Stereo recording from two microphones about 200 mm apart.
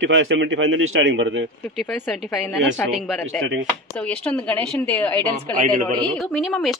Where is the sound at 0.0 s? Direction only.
70° right (ahead or behind).